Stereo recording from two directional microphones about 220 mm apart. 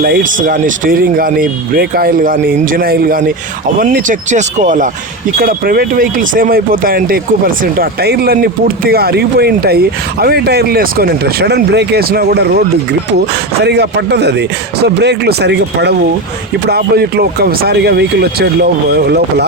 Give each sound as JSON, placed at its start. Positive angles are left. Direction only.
{"t": 0.0, "sound": "speech", "side_deg": -40}
{"t": 13.7, "sound": "speech", "side_deg": -50}